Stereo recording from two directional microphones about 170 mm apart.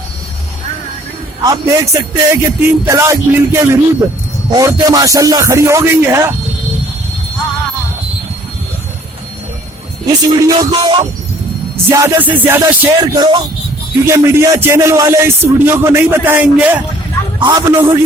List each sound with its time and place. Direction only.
1.5 s music: 20° right (ahead or behind)
4.5 s speech: 20° right (ahead or behind)
10.1 s speech: 20° right (ahead or behind)
11.9 s music: 15° right (ahead or behind)
13.0 s speech: 25° right (ahead or behind)
14.1 s music: 15° right (ahead or behind)